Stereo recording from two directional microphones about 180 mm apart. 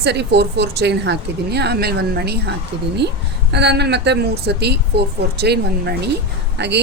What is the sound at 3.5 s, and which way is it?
Speech, 70° right (ahead or behind).